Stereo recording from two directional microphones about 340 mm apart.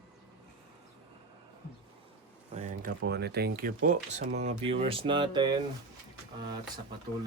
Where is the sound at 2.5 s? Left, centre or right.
Right.